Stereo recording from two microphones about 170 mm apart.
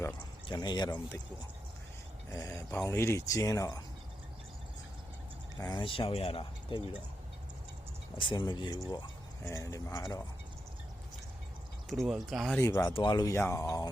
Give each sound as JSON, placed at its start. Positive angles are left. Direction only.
{"t": 0.4, "sound": "speech", "side_deg": 25}
{"t": 2.3, "sound": "speech", "side_deg": 20}
{"t": 5.5, "sound": "speech", "side_deg": 25}
{"t": 8.2, "sound": "speech", "side_deg": 25}
{"t": 11.9, "sound": "speech", "side_deg": 0}
{"t": 12.6, "sound": "speech", "side_deg": 15}
{"t": 12.9, "sound": "speech", "side_deg": 25}